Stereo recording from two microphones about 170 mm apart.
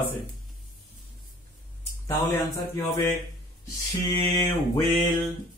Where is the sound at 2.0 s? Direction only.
20° left (ahead or behind).